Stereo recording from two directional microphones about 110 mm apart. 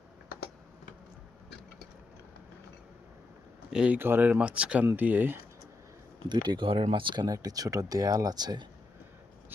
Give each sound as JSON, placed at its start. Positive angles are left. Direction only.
{"t": 3.7, "sound": "speech", "side_deg": -5}
{"t": 3.9, "sound": "speech", "side_deg": -20}
{"t": 6.2, "sound": "speech", "side_deg": -40}